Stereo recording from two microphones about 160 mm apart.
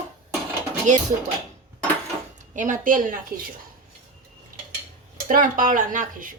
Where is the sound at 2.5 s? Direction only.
55° right (ahead or behind).